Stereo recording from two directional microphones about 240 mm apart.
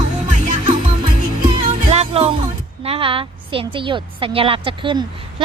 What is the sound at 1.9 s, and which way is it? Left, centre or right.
Music, right.